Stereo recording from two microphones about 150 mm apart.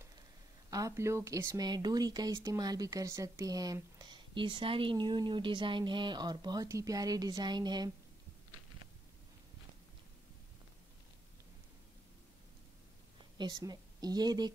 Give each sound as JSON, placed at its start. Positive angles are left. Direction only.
{"t": 0.7, "sound": "speech", "side_deg": -25}
{"t": 13.4, "sound": "a woman's voice", "side_deg": -25}